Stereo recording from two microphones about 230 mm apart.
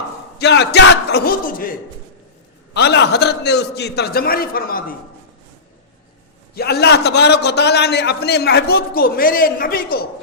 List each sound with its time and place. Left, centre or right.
0.3 s a man's voice: left
2.7 s a man's voice: left
6.5 s a man's voice: left